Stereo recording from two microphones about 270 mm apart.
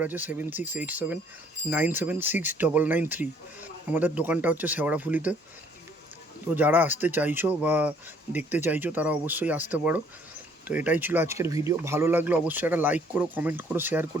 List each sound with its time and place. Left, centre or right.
0.0 s speech: centre
6.5 s speech: centre